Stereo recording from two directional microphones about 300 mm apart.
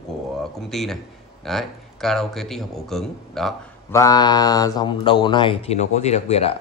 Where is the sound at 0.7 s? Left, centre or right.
Centre.